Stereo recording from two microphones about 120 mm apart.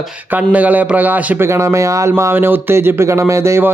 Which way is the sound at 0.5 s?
10° right (ahead or behind).